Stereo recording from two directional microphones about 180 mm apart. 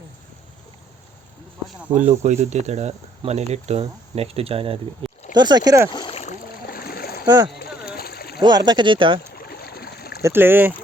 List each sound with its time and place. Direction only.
2.0 s speech: 40° right (ahead or behind)
5.0 s a sound: 30° right (ahead or behind)
5.4 s speech: 20° right (ahead or behind)
5.9 s rowboat: 30° left (ahead or behind)
6.7 s splash: 55° left (ahead or behind)
7.3 s speech: 20° right (ahead or behind)
7.6 s a sound: 60° left (ahead or behind)
8.4 s speech: 25° right (ahead or behind)
9.3 s boat: 60° left (ahead or behind)
10.2 s speech: 10° right (ahead or behind)